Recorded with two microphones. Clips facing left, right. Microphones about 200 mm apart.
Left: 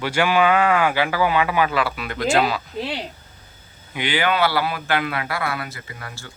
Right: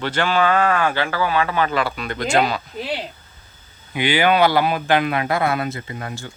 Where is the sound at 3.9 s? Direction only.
10° right (ahead or behind).